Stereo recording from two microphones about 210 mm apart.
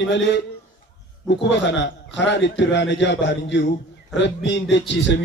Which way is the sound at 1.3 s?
55° left (ahead or behind).